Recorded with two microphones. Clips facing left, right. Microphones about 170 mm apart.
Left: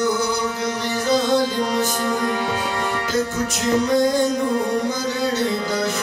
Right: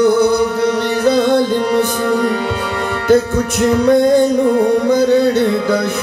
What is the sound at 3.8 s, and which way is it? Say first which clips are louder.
Music: right 9 dB; 60° right (ahead or behind).